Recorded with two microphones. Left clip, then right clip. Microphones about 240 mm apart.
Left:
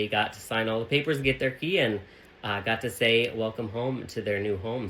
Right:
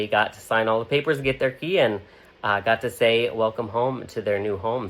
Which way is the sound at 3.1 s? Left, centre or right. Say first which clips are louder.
Right 4 dB; right.